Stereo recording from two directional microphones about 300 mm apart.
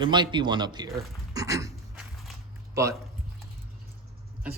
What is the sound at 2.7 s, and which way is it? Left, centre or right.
Speech, centre.